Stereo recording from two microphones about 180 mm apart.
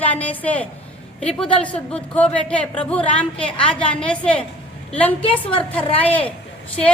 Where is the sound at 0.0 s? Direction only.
10° left (ahead or behind).